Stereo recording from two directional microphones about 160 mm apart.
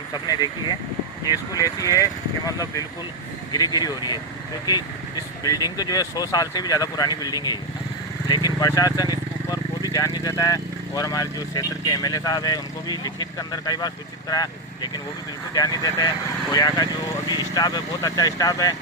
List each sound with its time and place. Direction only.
1.3 s speech: 20° left (ahead or behind)
8.6 s speech: 25° left (ahead or behind)